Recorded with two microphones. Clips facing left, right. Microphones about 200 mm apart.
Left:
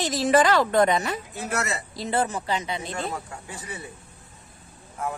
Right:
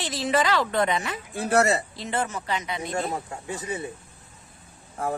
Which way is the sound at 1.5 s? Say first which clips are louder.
Right 8 dB; 30° right (ahead or behind).